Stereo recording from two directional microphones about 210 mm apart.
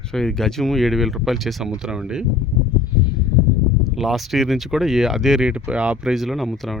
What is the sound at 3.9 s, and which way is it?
Speech, centre (ahead or behind).